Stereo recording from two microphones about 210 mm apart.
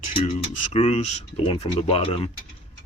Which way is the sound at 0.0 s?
25° left (ahead or behind).